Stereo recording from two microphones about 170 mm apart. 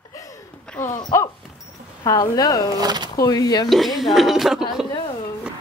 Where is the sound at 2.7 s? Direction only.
25° right (ahead or behind).